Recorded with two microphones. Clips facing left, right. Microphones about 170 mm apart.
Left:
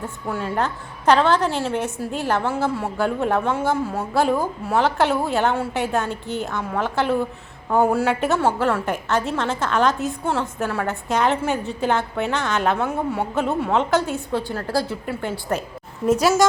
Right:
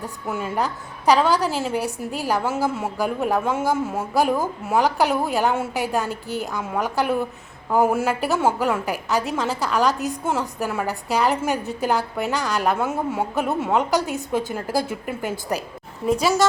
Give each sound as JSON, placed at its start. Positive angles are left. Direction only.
{"t": 0.3, "sound": "a woman's voice", "side_deg": -5}
{"t": 16.0, "sound": "a woman's voice", "side_deg": 5}